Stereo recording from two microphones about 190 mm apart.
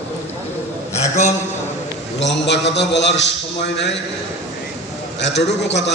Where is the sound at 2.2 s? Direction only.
65° left (ahead or behind).